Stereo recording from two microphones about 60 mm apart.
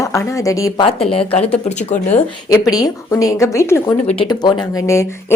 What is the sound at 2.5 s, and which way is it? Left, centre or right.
Speech, left.